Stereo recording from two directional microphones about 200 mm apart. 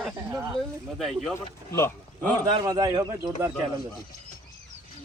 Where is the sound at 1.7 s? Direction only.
15° left (ahead or behind).